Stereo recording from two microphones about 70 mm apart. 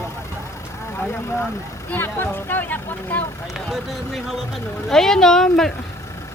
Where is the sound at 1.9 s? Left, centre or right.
Left.